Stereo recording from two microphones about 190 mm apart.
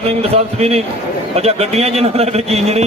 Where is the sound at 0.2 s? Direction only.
35° right (ahead or behind).